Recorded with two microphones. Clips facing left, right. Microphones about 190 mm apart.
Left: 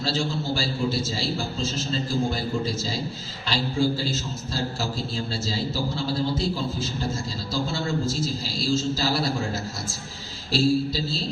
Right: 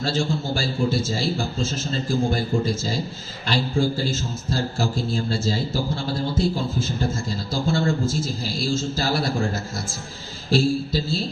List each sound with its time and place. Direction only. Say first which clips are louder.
0.0 s a man's voice: right 3 dB; 50° right (ahead or behind)
10.5 s a man's voice: right 1 dB; 50° right (ahead or behind)